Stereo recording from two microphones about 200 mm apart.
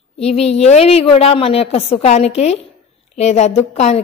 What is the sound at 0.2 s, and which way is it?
A woman's voice, 30° left (ahead or behind).